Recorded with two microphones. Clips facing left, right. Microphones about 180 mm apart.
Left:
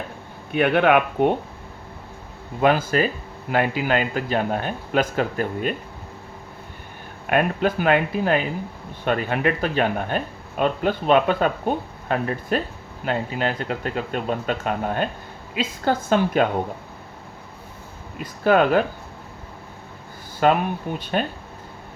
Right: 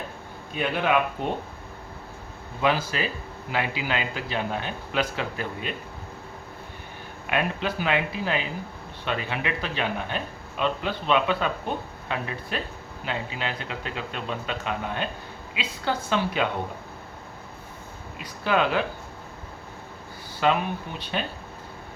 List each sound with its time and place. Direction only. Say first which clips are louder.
0.5 s speech: left 7 dB; 65° left (ahead or behind)
2.6 s speech: left 6 dB; 50° left (ahead or behind)
7.3 s speech: left 6 dB; 50° left (ahead or behind)
18.2 s speech: left 6 dB; 45° left (ahead or behind)
20.4 s speech: left 5 dB; 45° left (ahead or behind)